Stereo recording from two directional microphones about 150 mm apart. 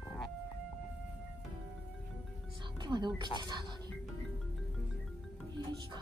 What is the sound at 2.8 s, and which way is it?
Music, 30° right (ahead or behind).